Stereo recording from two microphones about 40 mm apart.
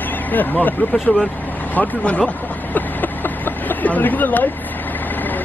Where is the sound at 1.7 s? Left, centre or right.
Left.